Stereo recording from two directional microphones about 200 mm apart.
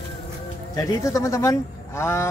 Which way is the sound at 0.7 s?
15° left (ahead or behind).